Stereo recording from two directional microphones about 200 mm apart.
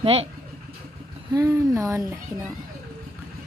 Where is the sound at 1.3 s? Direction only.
15° right (ahead or behind).